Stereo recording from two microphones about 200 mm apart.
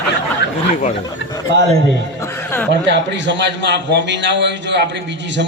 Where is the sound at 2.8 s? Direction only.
60° right (ahead or behind).